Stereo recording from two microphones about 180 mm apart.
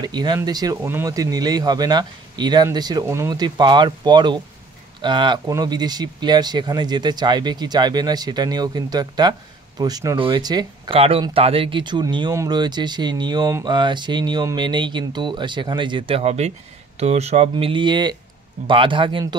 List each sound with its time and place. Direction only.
0.0 s speech: 25° right (ahead or behind)